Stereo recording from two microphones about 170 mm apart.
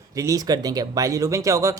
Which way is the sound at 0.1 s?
20° right (ahead or behind).